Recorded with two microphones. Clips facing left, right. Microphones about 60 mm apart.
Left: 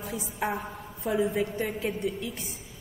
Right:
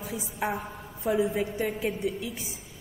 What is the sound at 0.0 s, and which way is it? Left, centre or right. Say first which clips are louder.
A woman's voice: even; centre.